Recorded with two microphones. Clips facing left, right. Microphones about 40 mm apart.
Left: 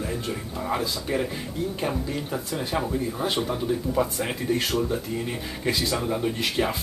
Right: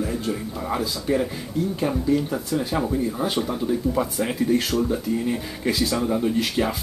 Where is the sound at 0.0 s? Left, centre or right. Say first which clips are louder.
Right 4 dB; centre.